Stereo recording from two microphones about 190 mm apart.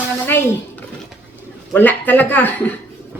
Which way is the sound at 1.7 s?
10° left (ahead or behind).